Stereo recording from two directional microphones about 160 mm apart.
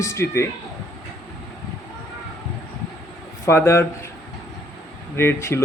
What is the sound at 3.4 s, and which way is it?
Speech, 15° left (ahead or behind).